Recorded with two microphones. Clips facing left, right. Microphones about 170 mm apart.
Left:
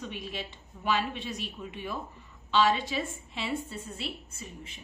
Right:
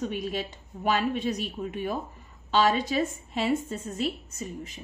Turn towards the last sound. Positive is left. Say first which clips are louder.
# right 8 dB
turn(degrees=-40)  # may be behind; listen again after turning